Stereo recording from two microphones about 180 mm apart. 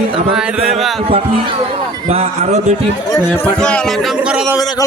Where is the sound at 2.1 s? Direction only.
35° right (ahead or behind).